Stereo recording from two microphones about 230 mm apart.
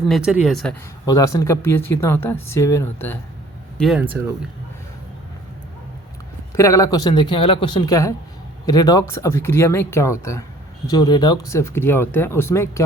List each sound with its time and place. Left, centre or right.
0.1 s speech: centre
1.0 s speech: centre
3.8 s speech: centre
6.5 s speech: centre